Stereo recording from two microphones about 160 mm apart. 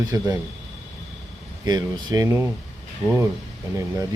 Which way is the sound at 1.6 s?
25° right (ahead or behind).